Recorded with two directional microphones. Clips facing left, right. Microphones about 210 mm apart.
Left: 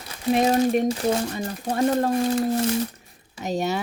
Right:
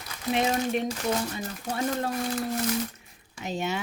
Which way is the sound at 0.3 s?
40° left (ahead or behind).